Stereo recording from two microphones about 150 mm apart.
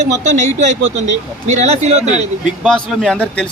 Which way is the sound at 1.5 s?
50° right (ahead or behind).